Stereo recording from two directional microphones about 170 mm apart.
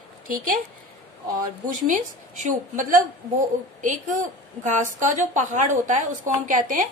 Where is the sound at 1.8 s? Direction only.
50° right (ahead or behind).